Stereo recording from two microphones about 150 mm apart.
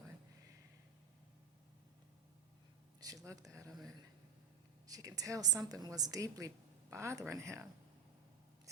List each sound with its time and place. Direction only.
3.0 s speech: 25° right (ahead or behind)
4.9 s a woman's voice: 25° right (ahead or behind)